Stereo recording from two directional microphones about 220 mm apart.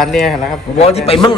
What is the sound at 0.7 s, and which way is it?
Speech, 30° left (ahead or behind).